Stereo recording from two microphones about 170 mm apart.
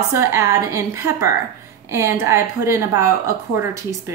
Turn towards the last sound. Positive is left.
turn(degrees=-15)  # may be behind; listen again after turning